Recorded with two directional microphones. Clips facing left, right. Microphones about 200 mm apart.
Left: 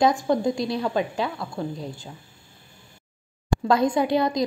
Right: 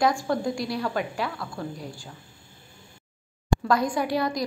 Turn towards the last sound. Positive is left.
turn(degrees=20)  # may be behind; listen again after turning